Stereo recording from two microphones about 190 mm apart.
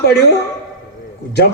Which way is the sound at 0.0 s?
60° left (ahead or behind).